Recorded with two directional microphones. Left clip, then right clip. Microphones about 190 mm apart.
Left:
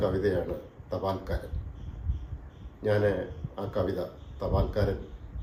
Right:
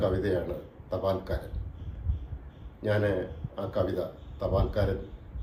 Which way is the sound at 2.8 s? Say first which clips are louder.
Left 1 dB; 15° left (ahead or behind).